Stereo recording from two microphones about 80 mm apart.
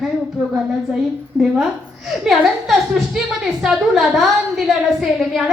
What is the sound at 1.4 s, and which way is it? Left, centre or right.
Speech, right.